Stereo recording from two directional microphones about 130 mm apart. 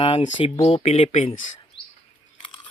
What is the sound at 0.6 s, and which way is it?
Speech, 55° left (ahead or behind).